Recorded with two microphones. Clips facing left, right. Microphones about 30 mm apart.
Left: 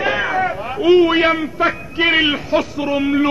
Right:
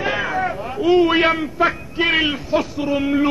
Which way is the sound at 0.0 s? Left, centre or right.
Centre.